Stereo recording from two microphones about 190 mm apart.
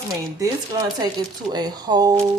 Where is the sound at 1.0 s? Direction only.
20° right (ahead or behind).